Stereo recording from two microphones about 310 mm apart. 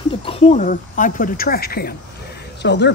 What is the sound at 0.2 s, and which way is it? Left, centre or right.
Speech, centre.